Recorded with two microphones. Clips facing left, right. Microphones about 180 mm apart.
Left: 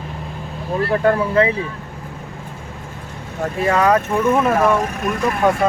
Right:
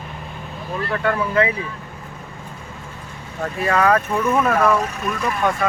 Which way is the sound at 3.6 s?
20° left (ahead or behind).